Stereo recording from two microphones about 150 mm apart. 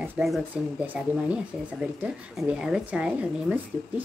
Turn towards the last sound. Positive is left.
turn(degrees=-10)  # may be behind; listen again after turning